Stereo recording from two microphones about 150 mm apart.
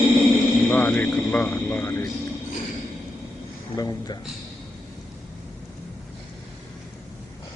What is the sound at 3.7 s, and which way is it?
Speech, 25° left (ahead or behind).